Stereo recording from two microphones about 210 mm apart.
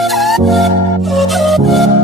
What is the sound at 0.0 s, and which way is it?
Music, centre (ahead or behind).